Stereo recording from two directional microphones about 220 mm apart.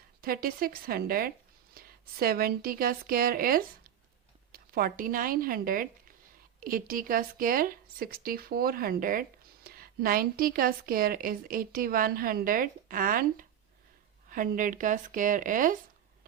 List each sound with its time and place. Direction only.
0.2 s a woman's voice: 40° right (ahead or behind)